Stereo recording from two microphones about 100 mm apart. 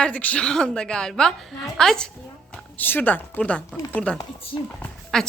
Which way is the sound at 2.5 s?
20° left (ahead or behind).